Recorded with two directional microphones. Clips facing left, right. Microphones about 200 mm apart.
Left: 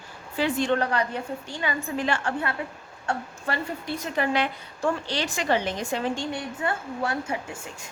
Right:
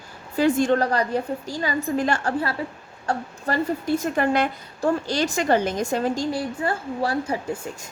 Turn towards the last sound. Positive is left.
turn(degrees=-35)  # may be behind; listen again after turning